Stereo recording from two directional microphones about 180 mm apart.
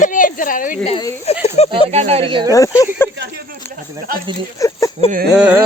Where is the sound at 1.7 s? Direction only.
35° right (ahead or behind).